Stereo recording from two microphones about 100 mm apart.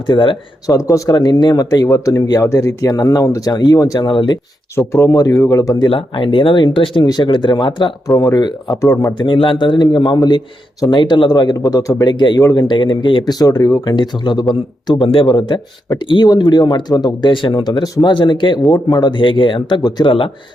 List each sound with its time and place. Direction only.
0.1 s speech: 55° left (ahead or behind)
0.7 s speech: 35° left (ahead or behind)
4.1 s speech: 55° left (ahead or behind)
4.9 s speech: 30° left (ahead or behind)
5.8 s a man's voice: 55° left (ahead or behind)
8.0 s speech: 35° left (ahead or behind)
9.1 s a man's voice: 55° left (ahead or behind); by 13.9 s 35° left (ahead or behind)
13.9 s a man's voice: 50° left (ahead or behind)
15.0 s speech: 65° left (ahead or behind)
15.3 s a man's voice: 50° left (ahead or behind)
18.1 s a man's voice: 50° left (ahead or behind)